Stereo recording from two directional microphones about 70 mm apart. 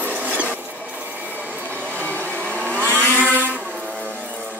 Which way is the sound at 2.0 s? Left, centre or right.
Left.